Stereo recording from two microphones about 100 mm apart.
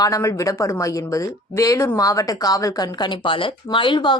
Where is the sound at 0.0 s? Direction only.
30° left (ahead or behind).